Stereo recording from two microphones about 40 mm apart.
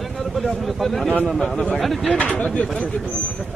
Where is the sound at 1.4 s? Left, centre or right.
Centre.